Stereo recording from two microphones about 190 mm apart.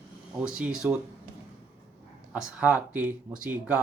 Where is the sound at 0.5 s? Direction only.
5° right (ahead or behind).